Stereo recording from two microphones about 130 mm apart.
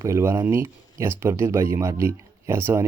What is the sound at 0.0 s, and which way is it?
Speech, 20° right (ahead or behind).